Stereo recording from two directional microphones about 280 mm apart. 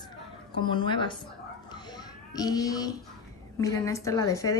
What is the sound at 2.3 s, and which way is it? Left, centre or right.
A woman's voice, centre.